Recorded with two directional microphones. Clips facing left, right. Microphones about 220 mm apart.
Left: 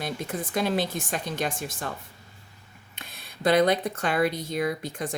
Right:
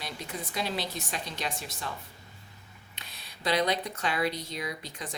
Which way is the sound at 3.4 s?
50° left (ahead or behind).